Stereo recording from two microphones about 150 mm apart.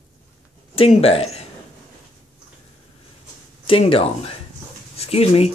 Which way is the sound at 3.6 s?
40° left (ahead or behind).